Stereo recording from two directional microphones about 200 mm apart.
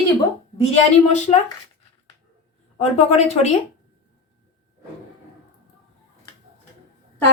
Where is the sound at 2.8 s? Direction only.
30° left (ahead or behind).